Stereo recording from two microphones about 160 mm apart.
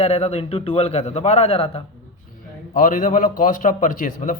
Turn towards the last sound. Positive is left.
turn(degrees=55)  # may be behind; listen again after turning